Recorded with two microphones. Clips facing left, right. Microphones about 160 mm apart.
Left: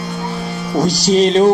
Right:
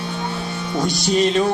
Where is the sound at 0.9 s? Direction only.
90° left.